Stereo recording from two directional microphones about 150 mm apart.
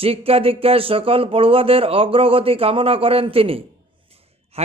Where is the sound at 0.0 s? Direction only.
40° right (ahead or behind).